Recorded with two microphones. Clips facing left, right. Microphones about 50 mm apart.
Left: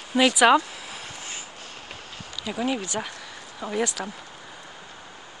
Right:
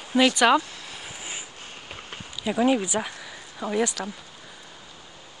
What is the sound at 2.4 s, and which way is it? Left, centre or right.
Speech, centre.